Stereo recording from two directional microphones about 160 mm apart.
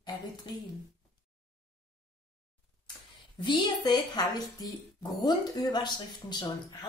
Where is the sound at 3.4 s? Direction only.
25° left (ahead or behind).